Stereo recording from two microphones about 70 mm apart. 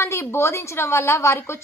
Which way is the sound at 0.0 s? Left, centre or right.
Left.